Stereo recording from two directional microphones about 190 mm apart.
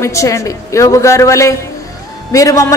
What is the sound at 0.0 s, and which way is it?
A woman's voice, 15° left (ahead or behind).